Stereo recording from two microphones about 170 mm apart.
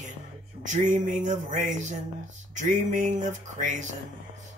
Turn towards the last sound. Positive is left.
turn(degrees=-45)  # may be behind; listen again after turning